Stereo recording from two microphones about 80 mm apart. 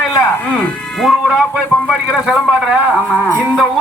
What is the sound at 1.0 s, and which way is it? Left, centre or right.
A man's voice, centre.